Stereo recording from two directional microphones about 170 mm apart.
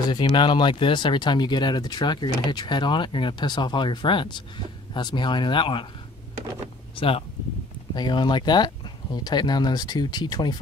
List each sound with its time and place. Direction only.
0.1 s speech: 25° left (ahead or behind)
7.0 s speech: 35° left (ahead or behind)